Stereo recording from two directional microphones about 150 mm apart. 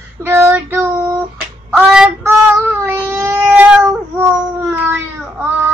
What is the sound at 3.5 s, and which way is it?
Cat, 5° right (ahead or behind).